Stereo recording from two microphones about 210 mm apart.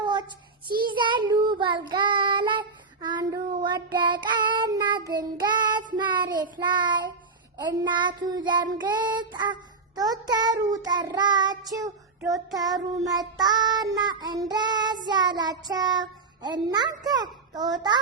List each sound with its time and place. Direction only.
0.0 s child singing: 20° right (ahead or behind)